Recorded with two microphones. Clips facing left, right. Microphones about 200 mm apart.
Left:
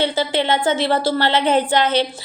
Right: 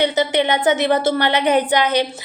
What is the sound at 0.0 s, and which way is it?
A woman's voice, 20° right (ahead or behind).